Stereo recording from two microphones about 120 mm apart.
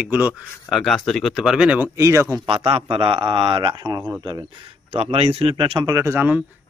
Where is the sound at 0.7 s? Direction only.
Centre (ahead or behind).